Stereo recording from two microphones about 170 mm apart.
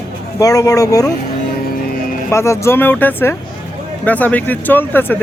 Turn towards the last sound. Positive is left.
turn(degrees=10)  # may be behind; listen again after turning